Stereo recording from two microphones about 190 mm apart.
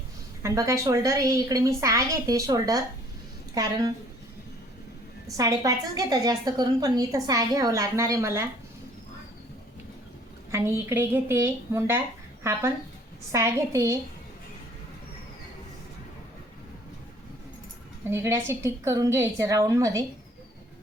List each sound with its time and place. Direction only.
0.4 s a woman's voice: 15° right (ahead or behind)
5.4 s a woman's voice: 20° right (ahead or behind)
10.5 s a woman's voice: 15° right (ahead or behind)
18.1 s a woman's voice: 15° right (ahead or behind)